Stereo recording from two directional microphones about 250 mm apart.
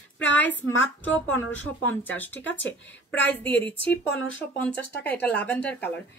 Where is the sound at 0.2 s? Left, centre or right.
Left.